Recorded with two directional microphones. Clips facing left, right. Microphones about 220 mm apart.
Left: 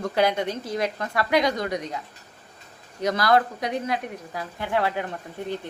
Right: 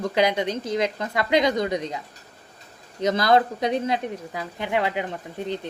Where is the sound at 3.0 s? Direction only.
20° right (ahead or behind).